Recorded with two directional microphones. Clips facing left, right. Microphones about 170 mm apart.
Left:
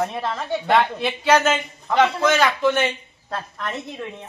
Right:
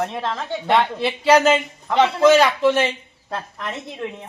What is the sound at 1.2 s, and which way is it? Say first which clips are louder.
A woman's voice: right 3 dB; 30° right (ahead or behind).